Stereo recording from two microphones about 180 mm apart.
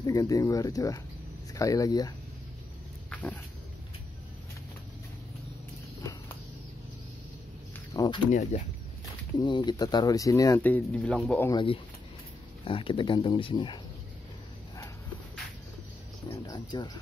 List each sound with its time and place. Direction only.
0.0 s speech: 20° left (ahead or behind)
3.1 s a sound: 10° left (ahead or behind)
7.7 s a sound: 20° left (ahead or behind)
8.3 s speech: 45° left (ahead or behind)
9.4 s speech: 25° left (ahead or behind); by 11.4 s 5° left (ahead or behind)
12.6 s speech: 30° left (ahead or behind)
16.3 s speech: 25° left (ahead or behind)